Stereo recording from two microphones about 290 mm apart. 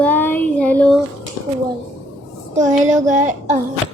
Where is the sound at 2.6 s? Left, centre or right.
Right.